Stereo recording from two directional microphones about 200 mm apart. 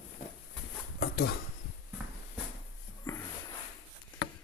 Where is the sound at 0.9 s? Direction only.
50° left (ahead or behind).